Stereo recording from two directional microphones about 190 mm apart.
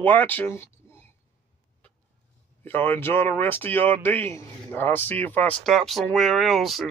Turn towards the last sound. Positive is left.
turn(degrees=0)  # may be behind; listen again after turning